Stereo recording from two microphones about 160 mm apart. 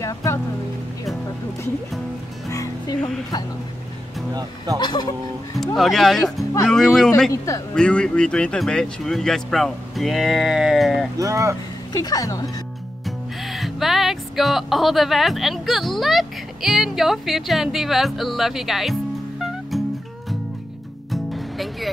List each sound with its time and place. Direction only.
0.0 s music: 20° left (ahead or behind)
2.5 s music: 20° left (ahead or behind)
4.3 s speech: 25° right (ahead or behind)
4.7 s speech: 30° left (ahead or behind)
5.8 s speech: centre (ahead or behind)
7.2 s speech: 20° left (ahead or behind)
7.7 s speech: 5° left (ahead or behind)
11.1 s speech: 20° right (ahead or behind)
11.9 s speech: 25° left (ahead or behind)
13.0 s speech: centre (ahead or behind)
21.1 s music: centre (ahead or behind)